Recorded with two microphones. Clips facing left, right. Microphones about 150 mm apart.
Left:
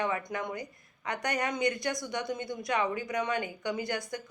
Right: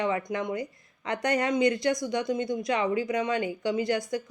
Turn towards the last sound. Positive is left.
turn(degrees=-20)  # may be behind; listen again after turning